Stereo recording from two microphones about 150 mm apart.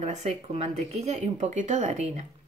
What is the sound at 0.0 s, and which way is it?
A woman's voice, 50° right (ahead or behind).